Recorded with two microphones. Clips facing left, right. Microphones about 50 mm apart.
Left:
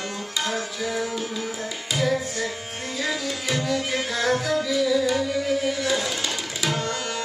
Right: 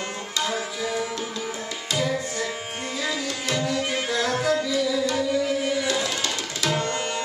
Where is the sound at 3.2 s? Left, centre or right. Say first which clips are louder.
Even; centre.